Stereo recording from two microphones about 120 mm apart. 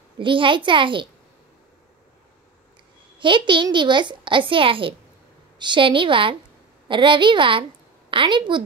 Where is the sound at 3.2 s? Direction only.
45° right (ahead or behind).